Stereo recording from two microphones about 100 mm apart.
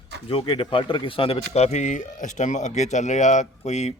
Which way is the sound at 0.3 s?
65° left (ahead or behind).